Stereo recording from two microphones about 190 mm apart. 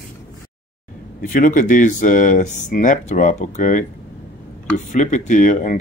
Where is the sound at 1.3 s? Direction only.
45° left (ahead or behind).